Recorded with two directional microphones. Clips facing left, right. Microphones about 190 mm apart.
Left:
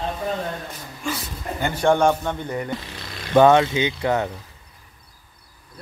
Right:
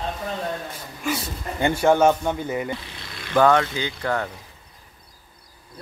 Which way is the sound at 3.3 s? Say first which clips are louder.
Left 4 dB; 20° left (ahead or behind).